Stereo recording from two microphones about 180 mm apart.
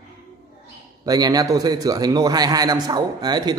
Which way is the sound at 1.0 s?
20° right (ahead or behind).